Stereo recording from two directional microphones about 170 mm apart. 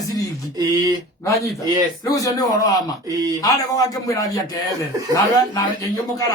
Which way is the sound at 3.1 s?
20° right (ahead or behind).